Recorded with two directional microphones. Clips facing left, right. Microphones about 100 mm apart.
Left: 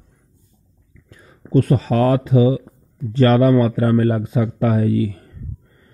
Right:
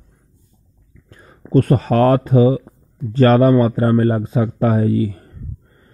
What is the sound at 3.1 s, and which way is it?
A man's voice, 40° right (ahead or behind).